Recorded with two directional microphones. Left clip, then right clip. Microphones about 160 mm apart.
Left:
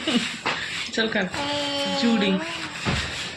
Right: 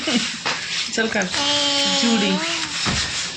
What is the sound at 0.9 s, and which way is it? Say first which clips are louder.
Speech: right 2 dB; 35° right (ahead or behind).